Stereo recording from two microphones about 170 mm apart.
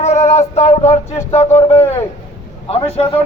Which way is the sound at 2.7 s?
35° left (ahead or behind).